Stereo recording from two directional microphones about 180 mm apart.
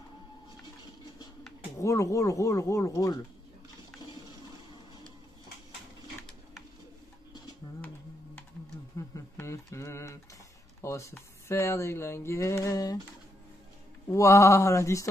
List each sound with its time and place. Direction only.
1.8 s speech: 15° left (ahead or behind)
8.9 s a sound: 15° left (ahead or behind)
10.8 s speech: 15° left (ahead or behind)
14.1 s speech: 15° left (ahead or behind)